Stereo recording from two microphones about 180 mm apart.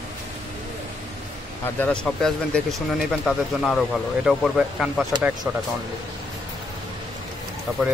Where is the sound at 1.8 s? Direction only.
5° left (ahead or behind).